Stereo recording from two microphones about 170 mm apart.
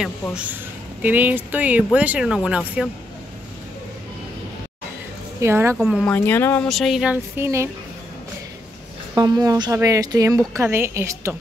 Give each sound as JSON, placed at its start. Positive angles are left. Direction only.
{"t": 1.0, "sound": "speech", "side_deg": -10}
{"t": 5.4, "sound": "speech", "side_deg": -15}
{"t": 5.8, "sound": "speech", "side_deg": -5}
{"t": 6.0, "sound": "speech", "side_deg": 10}
{"t": 6.7, "sound": "speech", "side_deg": 0}
{"t": 9.1, "sound": "speech", "side_deg": -20}